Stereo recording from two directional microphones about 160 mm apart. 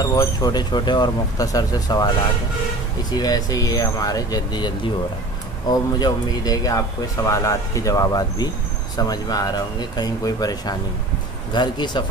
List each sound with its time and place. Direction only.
0.0 s speech: 20° left (ahead or behind)
3.1 s speech: 25° left (ahead or behind)